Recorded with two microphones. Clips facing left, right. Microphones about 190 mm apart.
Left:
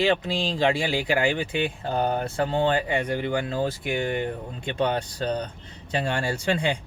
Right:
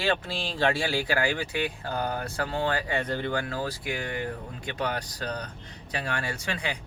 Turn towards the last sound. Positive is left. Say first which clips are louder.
# left 8 dB
turn(degrees=30)  # may be behind; listen again after turning